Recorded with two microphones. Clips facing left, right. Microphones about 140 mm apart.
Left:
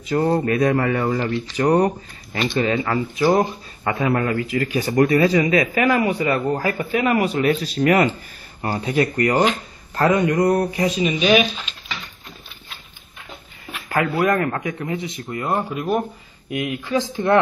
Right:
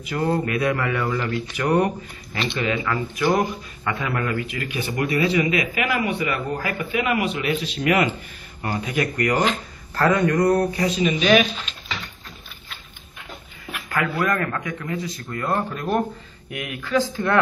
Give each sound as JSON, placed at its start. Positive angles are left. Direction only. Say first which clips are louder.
{"t": 0.0, "sound": "a man's voice", "louder": "left 4 dB", "side_deg": 40}
{"t": 9.9, "sound": "speech", "louder": "left 1 dB", "side_deg": 15}
{"t": 13.8, "sound": "a man's voice", "louder": "left 4 dB", "side_deg": 30}
{"t": 16.4, "sound": "a man's voice", "louder": "left 6 dB", "side_deg": 20}